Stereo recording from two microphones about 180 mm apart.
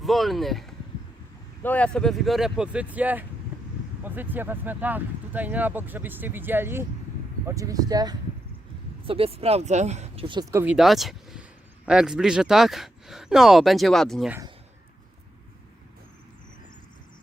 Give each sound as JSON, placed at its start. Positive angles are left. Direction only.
{"t": 0.0, "sound": "speech", "side_deg": 0}
{"t": 9.0, "sound": "speech", "side_deg": -30}
{"t": 10.5, "sound": "speech", "side_deg": -10}
{"t": 10.8, "sound": "speech", "side_deg": 0}